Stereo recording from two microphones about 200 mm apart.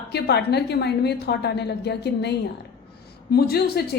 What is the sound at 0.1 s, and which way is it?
A woman's voice, 55° left (ahead or behind).